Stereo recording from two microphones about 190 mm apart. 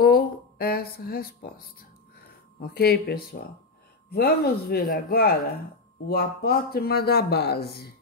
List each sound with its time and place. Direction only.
0.0 s speech: 55° left (ahead or behind)